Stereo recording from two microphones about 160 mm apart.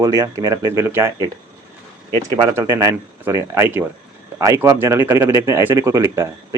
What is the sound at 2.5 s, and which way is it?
Speech, 15° right (ahead or behind).